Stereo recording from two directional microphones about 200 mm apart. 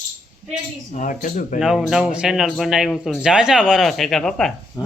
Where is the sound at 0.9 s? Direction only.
40° left (ahead or behind).